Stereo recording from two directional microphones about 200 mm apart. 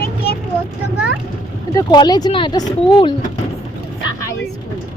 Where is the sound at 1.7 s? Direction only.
20° left (ahead or behind).